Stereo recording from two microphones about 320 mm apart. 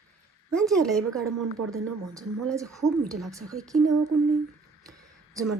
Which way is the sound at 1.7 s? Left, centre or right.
Centre.